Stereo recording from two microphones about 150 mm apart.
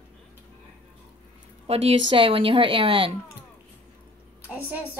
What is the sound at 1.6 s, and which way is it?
A woman's voice, 40° right (ahead or behind).